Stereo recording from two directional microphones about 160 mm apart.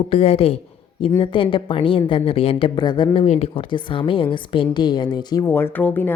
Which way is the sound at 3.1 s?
40° left (ahead or behind).